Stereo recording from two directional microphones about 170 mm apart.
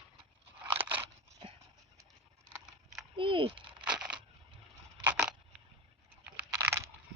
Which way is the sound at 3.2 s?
30° right (ahead or behind).